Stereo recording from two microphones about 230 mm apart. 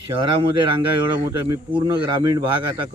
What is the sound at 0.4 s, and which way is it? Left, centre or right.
Speech, right.